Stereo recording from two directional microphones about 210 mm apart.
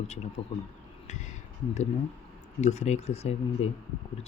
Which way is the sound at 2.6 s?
35° left (ahead or behind).